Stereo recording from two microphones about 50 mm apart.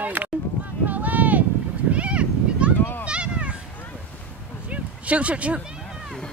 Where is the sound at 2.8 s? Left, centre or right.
Left.